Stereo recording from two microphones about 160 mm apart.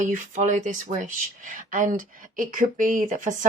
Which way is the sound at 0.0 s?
50° right (ahead or behind).